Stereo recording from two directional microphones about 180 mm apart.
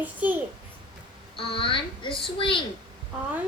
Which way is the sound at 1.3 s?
30° left (ahead or behind).